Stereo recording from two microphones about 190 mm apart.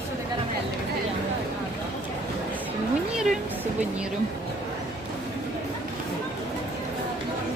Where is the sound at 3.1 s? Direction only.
Centre (ahead or behind).